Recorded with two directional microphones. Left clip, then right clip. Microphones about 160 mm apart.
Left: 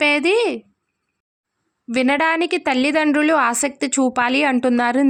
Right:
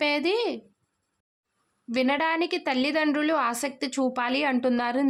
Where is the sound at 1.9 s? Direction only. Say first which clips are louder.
Left 7 dB; 35° left (ahead or behind).